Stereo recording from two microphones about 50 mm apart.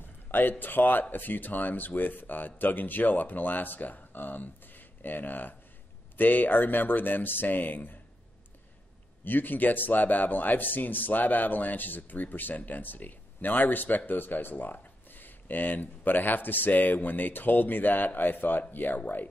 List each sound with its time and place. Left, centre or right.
0.0 s a man's voice: left
9.2 s speech: left